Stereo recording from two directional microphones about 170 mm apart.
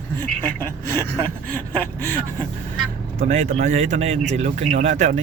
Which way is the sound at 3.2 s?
40° right (ahead or behind).